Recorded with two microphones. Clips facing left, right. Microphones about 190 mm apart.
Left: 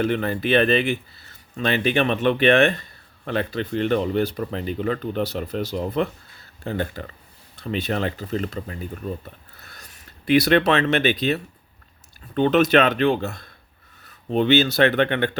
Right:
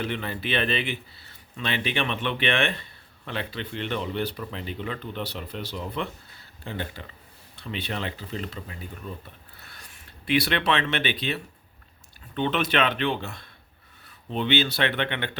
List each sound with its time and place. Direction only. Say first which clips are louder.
0.0 s speech: left 8 dB; 45° left (ahead or behind)
9.6 s a sound: left 2 dB; 40° left (ahead or behind)
12.3 s speech: left 9 dB; 40° left (ahead or behind)